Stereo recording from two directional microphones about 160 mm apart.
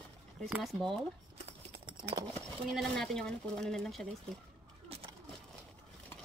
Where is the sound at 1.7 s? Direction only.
30° right (ahead or behind).